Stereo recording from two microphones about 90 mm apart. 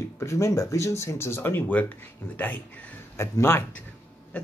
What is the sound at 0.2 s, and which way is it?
Speech, 35° left (ahead or behind).